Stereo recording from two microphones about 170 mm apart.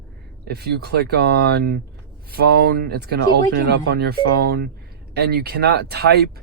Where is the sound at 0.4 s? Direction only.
65° right (ahead or behind).